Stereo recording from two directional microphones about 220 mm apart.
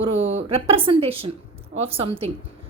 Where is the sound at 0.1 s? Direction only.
60° right (ahead or behind).